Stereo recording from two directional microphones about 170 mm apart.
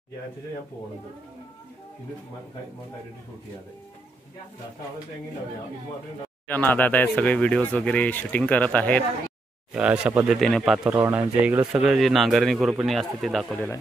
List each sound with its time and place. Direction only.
6.4 s speech: 10° left (ahead or behind)
9.8 s a man's voice: 5° right (ahead or behind)